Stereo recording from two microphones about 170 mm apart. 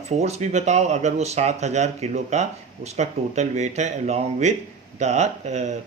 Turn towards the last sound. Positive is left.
turn(degrees=-45)  # may be behind; listen again after turning